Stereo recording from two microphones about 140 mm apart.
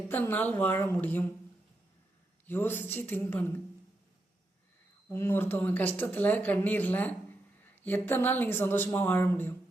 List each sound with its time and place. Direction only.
0.1 s speech: 15° left (ahead or behind)
2.5 s speech: 15° left (ahead or behind)
5.0 s speech: 15° left (ahead or behind)